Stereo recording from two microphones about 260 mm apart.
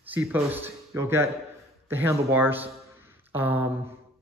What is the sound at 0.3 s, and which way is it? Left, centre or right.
A man's voice, centre.